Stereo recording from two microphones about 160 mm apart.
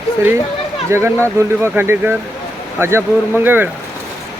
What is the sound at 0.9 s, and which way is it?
Speech, 15° right (ahead or behind).